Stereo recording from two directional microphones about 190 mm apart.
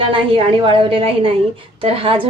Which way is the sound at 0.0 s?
25° right (ahead or behind).